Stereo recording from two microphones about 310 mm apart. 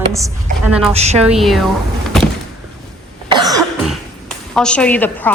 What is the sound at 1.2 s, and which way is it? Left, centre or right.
Speech, centre.